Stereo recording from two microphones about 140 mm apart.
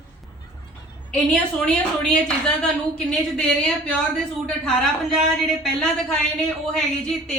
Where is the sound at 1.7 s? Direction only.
5° left (ahead or behind).